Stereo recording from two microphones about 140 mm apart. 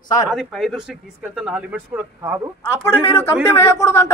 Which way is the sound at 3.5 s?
20° left (ahead or behind).